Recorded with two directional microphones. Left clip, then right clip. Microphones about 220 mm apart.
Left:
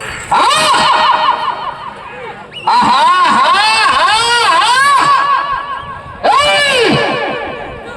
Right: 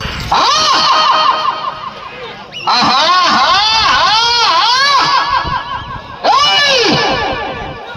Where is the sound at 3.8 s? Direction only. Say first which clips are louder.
Even; 50° left (ahead or behind).